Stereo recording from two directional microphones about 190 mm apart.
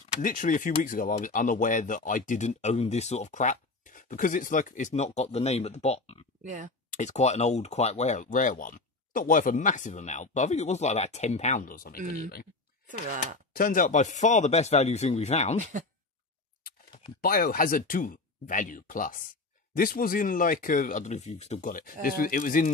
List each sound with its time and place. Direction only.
0.1 s speech: 45° left (ahead or behind)
6.4 s speech: 40° right (ahead or behind)
6.9 s speech: 40° left (ahead or behind)
13.6 s speech: 45° left (ahead or behind)
17.2 s speech: 50° left (ahead or behind)